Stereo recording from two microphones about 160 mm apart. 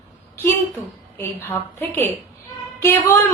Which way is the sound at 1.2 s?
15° left (ahead or behind).